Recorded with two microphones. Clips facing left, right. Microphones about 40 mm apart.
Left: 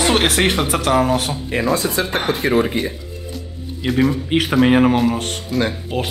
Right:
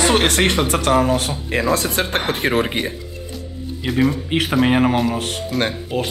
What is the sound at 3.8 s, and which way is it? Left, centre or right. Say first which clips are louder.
A man's voice: left 1 dB; centre.